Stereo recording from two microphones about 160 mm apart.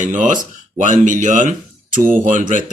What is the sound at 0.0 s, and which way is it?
Speech, 50° right (ahead or behind).